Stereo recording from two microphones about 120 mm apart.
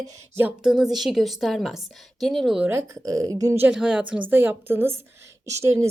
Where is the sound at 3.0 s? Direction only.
30° right (ahead or behind).